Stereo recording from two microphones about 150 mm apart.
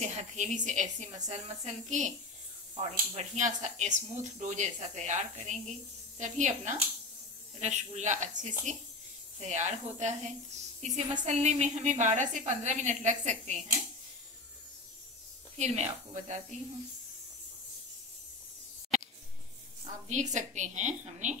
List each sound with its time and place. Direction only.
0.0 s speech: 50° right (ahead or behind)
3.2 s speech: 50° right (ahead or behind)
15.5 s speech: 45° right (ahead or behind)
19.8 s speech: 55° right (ahead or behind)